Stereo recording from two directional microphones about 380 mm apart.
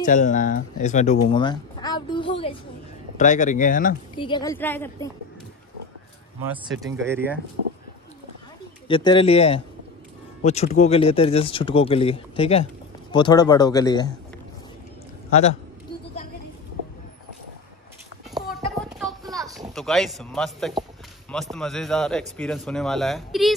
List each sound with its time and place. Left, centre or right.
0.0 s speech: centre
6.4 s speech: centre
8.8 s speech: centre
18.3 s a sound: centre
21.3 s speech: centre